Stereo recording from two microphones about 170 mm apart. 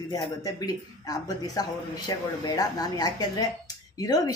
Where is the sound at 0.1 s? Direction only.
20° left (ahead or behind).